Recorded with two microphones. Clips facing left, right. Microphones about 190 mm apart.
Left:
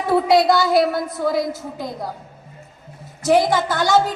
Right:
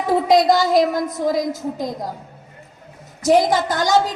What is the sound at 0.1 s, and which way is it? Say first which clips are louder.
A woman's voice: even; 20° right (ahead or behind).